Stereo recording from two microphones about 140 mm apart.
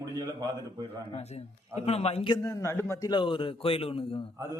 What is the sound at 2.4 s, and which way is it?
Speech, 20° left (ahead or behind).